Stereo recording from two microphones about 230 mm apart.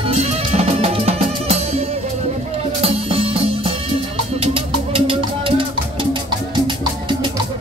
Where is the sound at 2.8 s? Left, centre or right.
Right.